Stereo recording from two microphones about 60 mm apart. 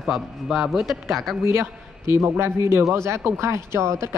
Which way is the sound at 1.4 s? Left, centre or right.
Right.